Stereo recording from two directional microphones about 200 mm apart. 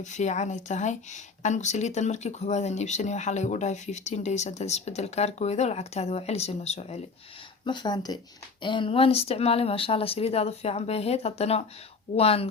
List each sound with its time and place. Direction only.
0.0 s speech: 35° left (ahead or behind)
7.6 s speech: 20° left (ahead or behind)